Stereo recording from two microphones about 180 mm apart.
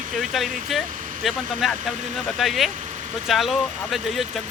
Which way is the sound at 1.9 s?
40° right (ahead or behind).